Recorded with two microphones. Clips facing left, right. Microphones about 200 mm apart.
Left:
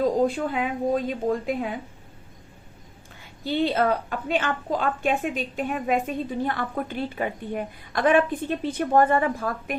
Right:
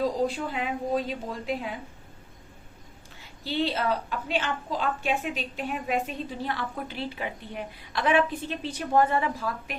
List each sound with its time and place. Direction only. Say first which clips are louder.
0.0 s a woman's voice: left 5 dB; 50° left (ahead or behind)
3.4 s a woman's voice: left 5 dB; 50° left (ahead or behind)